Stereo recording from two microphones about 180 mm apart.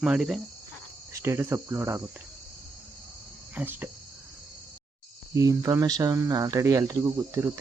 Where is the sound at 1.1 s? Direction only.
15° right (ahead or behind).